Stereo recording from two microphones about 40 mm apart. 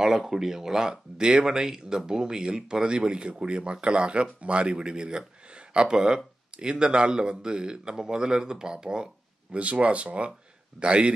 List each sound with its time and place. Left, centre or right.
0.0 s speech: centre
9.6 s speech: right